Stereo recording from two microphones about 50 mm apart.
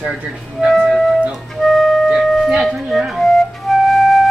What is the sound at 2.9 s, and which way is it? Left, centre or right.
Speech, centre.